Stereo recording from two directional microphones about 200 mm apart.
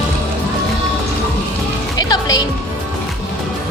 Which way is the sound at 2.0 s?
20° left (ahead or behind).